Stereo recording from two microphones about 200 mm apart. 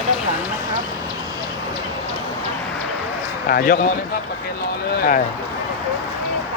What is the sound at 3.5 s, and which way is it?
Speech, 45° left (ahead or behind).